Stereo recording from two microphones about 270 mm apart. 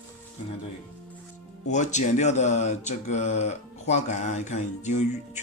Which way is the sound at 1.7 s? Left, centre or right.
Left.